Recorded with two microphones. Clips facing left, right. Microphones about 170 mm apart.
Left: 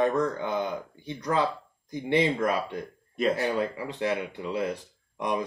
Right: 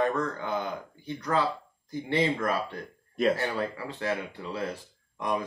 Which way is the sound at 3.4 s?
15° left (ahead or behind).